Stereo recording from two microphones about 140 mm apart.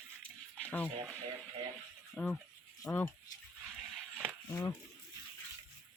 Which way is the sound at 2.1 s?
10° left (ahead or behind).